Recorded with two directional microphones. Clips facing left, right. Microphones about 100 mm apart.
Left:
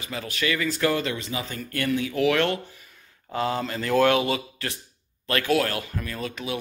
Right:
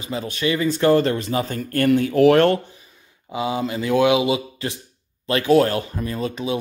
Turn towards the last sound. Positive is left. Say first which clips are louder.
# right 6 dB
turn(degrees=-25)  # may be behind; listen again after turning